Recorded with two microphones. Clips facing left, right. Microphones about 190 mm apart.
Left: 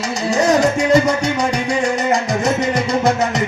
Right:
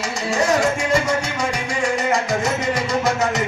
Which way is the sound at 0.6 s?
40° left (ahead or behind).